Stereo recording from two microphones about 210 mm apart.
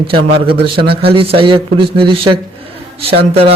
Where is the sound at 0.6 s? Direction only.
50° right (ahead or behind).